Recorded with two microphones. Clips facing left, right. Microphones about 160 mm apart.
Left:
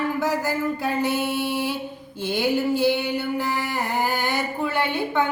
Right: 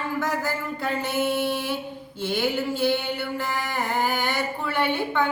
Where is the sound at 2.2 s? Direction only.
15° left (ahead or behind).